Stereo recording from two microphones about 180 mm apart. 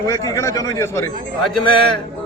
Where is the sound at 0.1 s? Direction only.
20° left (ahead or behind).